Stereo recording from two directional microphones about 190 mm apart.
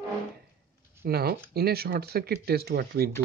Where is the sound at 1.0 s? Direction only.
55° right (ahead or behind).